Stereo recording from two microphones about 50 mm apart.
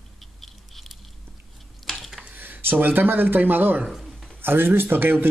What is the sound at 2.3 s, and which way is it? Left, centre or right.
Speech, right.